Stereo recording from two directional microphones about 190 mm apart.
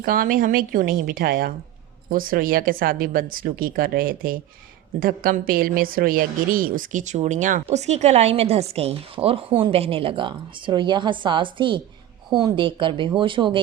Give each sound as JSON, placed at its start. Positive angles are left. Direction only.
{"t": 0.0, "sound": "a woman's voice", "side_deg": -50}